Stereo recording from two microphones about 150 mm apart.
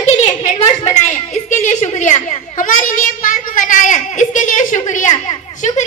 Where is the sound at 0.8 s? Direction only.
55° left (ahead or behind).